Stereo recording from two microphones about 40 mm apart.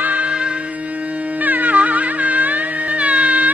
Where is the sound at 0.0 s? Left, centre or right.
Right.